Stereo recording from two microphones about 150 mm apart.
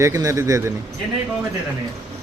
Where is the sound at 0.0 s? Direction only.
20° right (ahead or behind).